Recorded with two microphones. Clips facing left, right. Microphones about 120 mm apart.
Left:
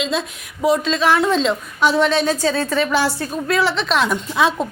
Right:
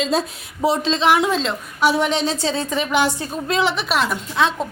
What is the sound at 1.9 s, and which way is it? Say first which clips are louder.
A woman's voice: left 3 dB; 15° right (ahead or behind).